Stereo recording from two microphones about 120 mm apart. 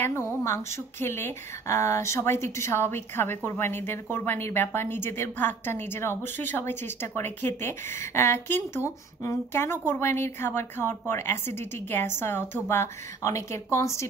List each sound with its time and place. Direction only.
0.0 s speech: 20° left (ahead or behind)